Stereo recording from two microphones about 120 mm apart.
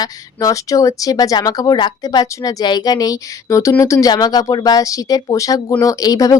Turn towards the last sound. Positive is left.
turn(degrees=30)  # may be behind; listen again after turning